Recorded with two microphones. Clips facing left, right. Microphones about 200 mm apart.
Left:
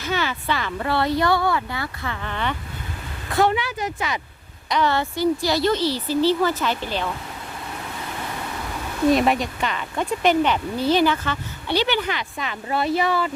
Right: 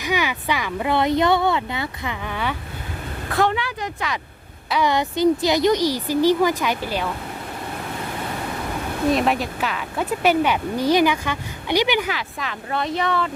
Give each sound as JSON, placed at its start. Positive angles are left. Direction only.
{"t": 0.0, "sound": "speech", "side_deg": -15}
{"t": 3.3, "sound": "speech", "side_deg": 0}
{"t": 4.7, "sound": "speech", "side_deg": -15}
{"t": 9.1, "sound": "speech", "side_deg": 0}